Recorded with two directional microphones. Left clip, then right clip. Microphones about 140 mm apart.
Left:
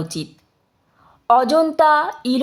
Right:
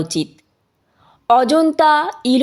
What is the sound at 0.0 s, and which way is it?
Speech, 25° right (ahead or behind).